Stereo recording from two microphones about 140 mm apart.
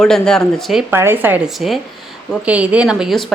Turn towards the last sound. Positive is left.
turn(degrees=-5)  # may be behind; listen again after turning